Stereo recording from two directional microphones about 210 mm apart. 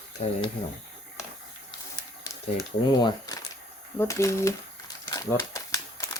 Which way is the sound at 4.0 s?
15° left (ahead or behind).